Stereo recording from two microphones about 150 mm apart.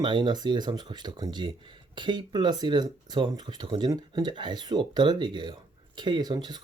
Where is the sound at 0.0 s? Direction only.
30° right (ahead or behind).